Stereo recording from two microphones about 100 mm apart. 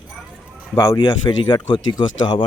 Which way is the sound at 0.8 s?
40° left (ahead or behind).